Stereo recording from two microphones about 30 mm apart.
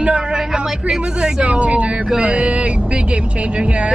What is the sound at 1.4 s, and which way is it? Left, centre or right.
Speech, right.